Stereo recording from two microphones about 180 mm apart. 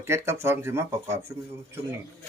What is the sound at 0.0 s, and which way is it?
Speech, 15° right (ahead or behind).